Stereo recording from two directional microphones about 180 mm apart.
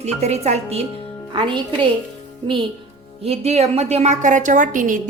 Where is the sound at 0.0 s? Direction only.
35° right (ahead or behind).